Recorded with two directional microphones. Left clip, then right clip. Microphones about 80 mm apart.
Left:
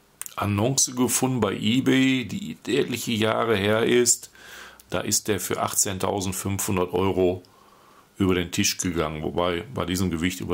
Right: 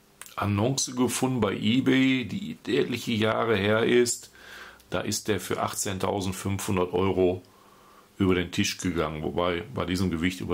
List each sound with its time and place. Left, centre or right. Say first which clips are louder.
0.2 s speech: left 2 dB; left